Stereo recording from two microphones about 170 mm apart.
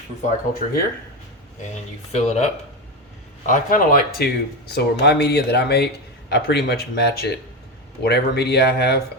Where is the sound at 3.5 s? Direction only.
50° left (ahead or behind).